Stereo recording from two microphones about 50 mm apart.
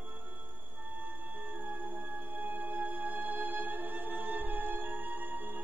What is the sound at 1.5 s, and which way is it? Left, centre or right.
Music, right.